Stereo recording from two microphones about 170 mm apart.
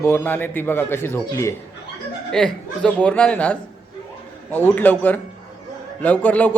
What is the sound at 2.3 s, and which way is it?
A man's voice, 5° left (ahead or behind).